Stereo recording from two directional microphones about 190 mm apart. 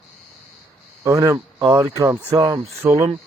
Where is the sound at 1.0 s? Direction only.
15° right (ahead or behind).